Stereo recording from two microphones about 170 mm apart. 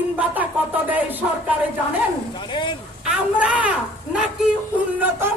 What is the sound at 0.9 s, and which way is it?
Music, 10° right (ahead or behind).